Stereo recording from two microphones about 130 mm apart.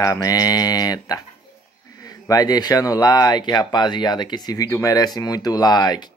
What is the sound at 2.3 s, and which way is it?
Speech, 30° left (ahead or behind).